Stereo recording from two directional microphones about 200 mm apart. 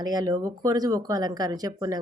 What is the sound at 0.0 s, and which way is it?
Speech, 20° right (ahead or behind).